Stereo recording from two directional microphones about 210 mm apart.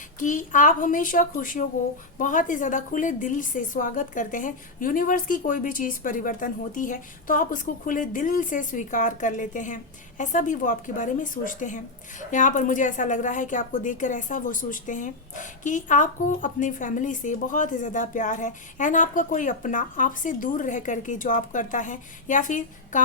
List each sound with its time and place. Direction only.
0.2 s a woman's voice: 40° left (ahead or behind)